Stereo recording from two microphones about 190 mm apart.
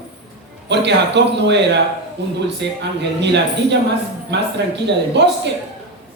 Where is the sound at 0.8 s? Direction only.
65° right (ahead or behind).